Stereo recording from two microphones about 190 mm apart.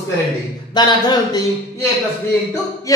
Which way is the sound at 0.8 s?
20° left (ahead or behind).